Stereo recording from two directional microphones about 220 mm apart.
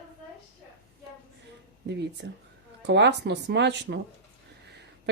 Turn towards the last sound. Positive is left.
turn(degrees=-50)  # may be behind; listen again after turning